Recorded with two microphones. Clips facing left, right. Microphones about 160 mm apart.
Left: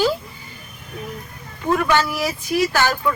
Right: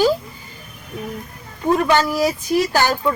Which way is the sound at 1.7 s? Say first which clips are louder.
Right 2 dB; 30° right (ahead or behind).